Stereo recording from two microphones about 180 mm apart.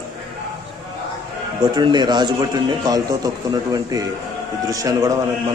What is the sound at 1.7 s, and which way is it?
A man's voice, 25° right (ahead or behind).